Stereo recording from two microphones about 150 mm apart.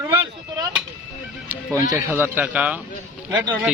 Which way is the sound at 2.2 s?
10° right (ahead or behind).